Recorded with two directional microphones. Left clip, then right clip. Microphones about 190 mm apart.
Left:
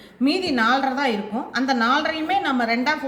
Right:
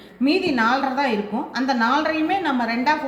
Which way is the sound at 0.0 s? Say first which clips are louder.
Right 2 dB; 30° left (ahead or behind).